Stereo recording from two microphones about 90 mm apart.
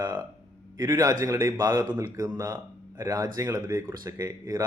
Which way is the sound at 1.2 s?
35° right (ahead or behind).